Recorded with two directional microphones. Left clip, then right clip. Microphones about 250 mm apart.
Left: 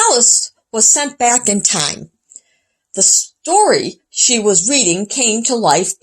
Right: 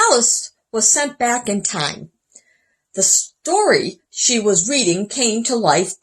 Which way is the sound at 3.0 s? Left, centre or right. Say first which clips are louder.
Left 3 dB; left.